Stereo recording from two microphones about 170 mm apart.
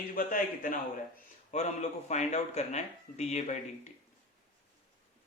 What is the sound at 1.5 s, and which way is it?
Speech, 40° left (ahead or behind).